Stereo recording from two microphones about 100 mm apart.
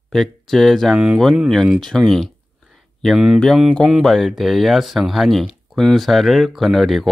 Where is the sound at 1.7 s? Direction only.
5° left (ahead or behind).